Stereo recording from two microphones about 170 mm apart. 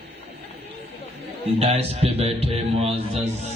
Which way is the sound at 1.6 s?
35° right (ahead or behind).